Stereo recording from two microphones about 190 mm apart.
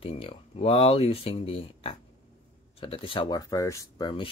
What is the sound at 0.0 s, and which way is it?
Speech, 30° left (ahead or behind).